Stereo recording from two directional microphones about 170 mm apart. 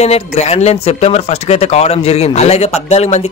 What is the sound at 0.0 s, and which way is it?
A man's voice, 40° left (ahead or behind).